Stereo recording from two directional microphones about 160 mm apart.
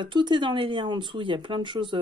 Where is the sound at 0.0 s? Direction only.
30° right (ahead or behind).